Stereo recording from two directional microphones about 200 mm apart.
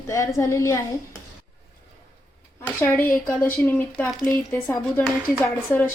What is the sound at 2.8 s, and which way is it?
A woman's voice, 10° left (ahead or behind).